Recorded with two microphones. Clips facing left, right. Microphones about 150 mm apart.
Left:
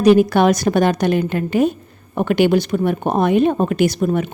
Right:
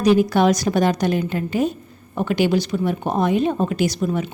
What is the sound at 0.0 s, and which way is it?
A woman's voice, 60° left (ahead or behind).